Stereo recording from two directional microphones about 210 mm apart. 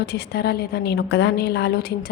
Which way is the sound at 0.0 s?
50° left (ahead or behind).